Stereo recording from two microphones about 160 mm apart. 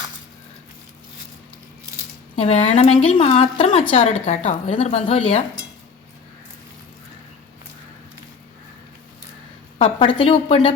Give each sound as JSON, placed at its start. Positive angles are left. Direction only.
{"t": 2.3, "sound": "a woman's voice", "side_deg": 40}
{"t": 9.7, "sound": "a woman's voice", "side_deg": 35}